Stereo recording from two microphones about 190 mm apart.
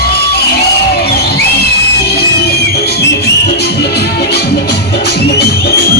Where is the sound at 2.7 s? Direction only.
55° left (ahead or behind).